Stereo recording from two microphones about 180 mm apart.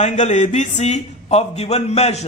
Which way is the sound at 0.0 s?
40° left (ahead or behind).